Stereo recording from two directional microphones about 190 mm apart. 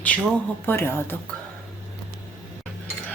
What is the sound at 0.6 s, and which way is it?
Speech, 10° left (ahead or behind).